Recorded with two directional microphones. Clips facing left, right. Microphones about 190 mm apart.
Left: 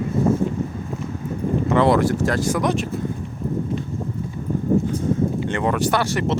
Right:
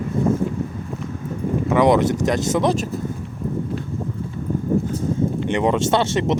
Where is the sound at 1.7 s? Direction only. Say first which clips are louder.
Right 2 dB; 15° right (ahead or behind).